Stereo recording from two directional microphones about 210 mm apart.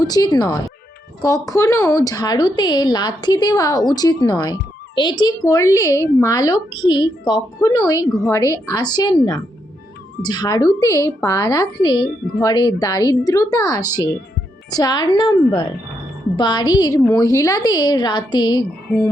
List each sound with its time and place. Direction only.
0.0 s a woman's voice: 15° left (ahead or behind)
18.9 s music: 5° left (ahead or behind)